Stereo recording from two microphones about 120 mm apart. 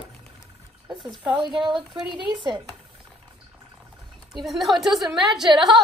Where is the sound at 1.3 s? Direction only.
40° right (ahead or behind).